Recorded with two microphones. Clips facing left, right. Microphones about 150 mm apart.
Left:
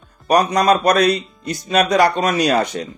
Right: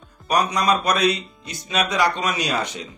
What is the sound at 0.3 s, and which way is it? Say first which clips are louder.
Speech: left 6 dB; 45° left (ahead or behind).